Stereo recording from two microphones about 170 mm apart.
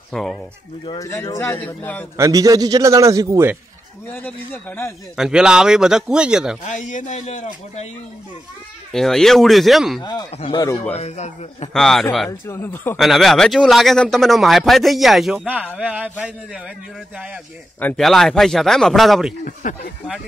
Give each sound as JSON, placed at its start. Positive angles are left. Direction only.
{"t": 0.1, "sound": "speech", "side_deg": 0}
{"t": 0.8, "sound": "a man's voice", "side_deg": 20}
{"t": 2.1, "sound": "a man's voice", "side_deg": -20}
{"t": 4.1, "sound": "a man's voice", "side_deg": 10}
{"t": 5.1, "sound": "speech", "side_deg": -5}
{"t": 6.6, "sound": "speech", "side_deg": 45}
{"t": 8.9, "sound": "speech", "side_deg": 0}
{"t": 10.3, "sound": "a man's voice", "side_deg": 35}
{"t": 11.7, "sound": "speech", "side_deg": 0}
{"t": 12.3, "sound": "a man's voice", "side_deg": 15}
{"t": 12.9, "sound": "speech", "side_deg": 0}
{"t": 17.7, "sound": "speech", "side_deg": 5}
{"t": 19.4, "sound": "speech", "side_deg": 50}